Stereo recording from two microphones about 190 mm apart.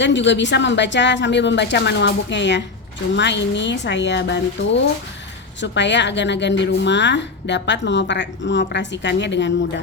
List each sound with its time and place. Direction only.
0.0 s a woman's voice: 70° left (ahead or behind)